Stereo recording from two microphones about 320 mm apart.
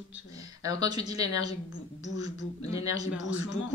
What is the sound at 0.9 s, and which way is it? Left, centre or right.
Speech, centre.